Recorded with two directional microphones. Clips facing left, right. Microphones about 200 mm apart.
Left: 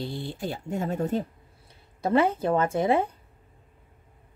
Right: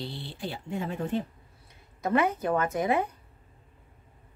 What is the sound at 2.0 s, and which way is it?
Speech, 30° left (ahead or behind).